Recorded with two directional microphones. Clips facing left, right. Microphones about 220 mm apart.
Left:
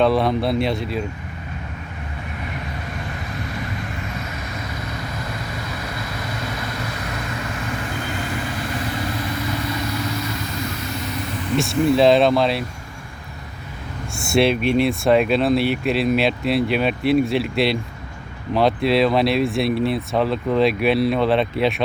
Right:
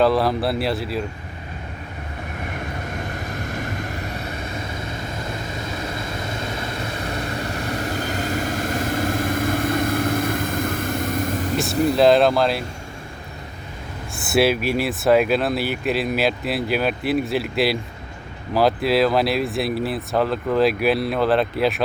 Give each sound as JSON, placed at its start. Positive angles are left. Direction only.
{"t": 0.0, "sound": "speech", "side_deg": 0}
{"t": 3.2, "sound": "vehicle", "side_deg": -45}
{"t": 6.1, "sound": "vehicle", "side_deg": -25}
{"t": 11.5, "sound": "speech", "side_deg": 0}
{"t": 14.2, "sound": "speech", "side_deg": -5}